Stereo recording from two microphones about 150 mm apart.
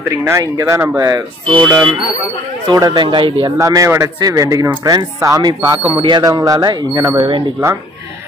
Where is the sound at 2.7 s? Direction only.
25° right (ahead or behind).